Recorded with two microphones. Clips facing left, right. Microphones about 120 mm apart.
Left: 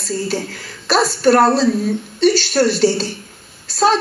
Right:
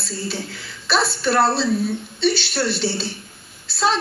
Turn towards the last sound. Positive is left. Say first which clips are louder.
# left 6 dB
turn(degrees=45)  # may be behind; listen again after turning